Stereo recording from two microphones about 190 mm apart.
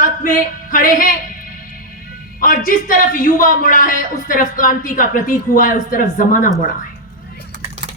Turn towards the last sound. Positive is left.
turn(degrees=-60)  # may be behind; listen again after turning